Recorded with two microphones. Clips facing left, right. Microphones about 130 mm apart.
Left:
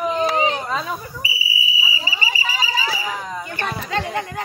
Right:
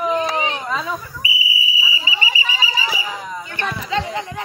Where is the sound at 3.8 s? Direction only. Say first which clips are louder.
Right 1 dB; 55° left (ahead or behind).